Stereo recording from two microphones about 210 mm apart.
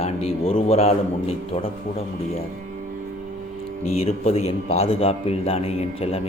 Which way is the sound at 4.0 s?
30° left (ahead or behind).